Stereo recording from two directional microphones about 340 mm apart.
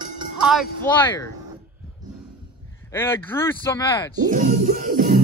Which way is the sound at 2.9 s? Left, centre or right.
Centre.